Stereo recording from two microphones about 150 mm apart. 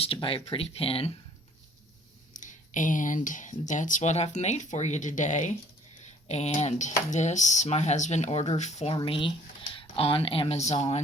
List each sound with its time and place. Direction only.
0.0 s speech: 40° left (ahead or behind)
2.4 s speech: 55° left (ahead or behind)
9.0 s speech: 35° left (ahead or behind)